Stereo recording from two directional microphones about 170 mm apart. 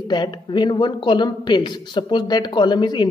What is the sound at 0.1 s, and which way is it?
A woman's voice, 25° left (ahead or behind).